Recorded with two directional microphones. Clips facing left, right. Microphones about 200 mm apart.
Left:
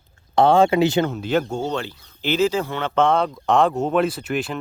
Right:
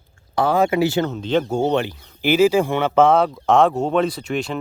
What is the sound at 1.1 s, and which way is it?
Speech, 10° left (ahead or behind).